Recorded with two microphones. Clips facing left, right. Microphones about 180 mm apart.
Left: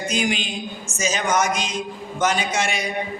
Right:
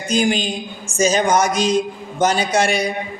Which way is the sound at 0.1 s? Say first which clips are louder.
Right 8 dB; 40° right (ahead or behind).